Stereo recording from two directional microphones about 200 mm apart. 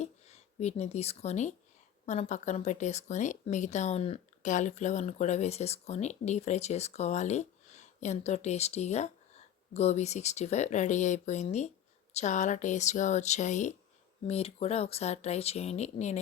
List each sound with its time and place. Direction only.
0.0 s speech: 35° left (ahead or behind)